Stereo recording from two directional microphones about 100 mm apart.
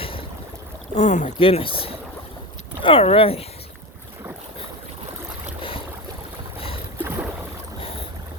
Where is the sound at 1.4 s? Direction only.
65° left (ahead or behind).